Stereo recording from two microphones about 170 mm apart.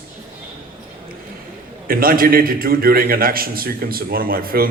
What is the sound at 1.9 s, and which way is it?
A man's voice, 60° right (ahead or behind).